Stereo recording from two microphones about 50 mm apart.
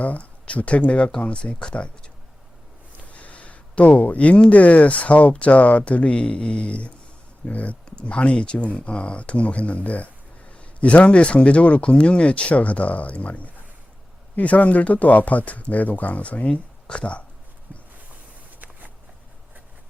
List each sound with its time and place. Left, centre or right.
0.0 s a man's voice: left
3.0 s a man's voice: left